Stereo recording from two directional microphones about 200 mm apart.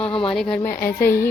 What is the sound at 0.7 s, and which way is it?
Speech, 45° left (ahead or behind).